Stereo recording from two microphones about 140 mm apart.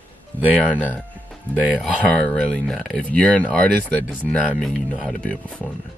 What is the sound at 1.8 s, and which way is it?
Speech, 5° left (ahead or behind).